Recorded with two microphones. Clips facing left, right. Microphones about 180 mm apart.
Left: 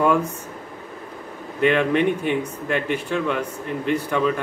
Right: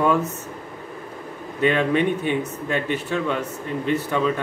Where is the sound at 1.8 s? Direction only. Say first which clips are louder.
Left 1 dB; 5° left (ahead or behind).